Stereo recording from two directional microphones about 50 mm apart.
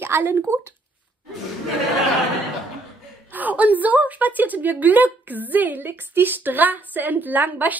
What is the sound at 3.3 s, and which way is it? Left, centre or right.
A woman's voice, right.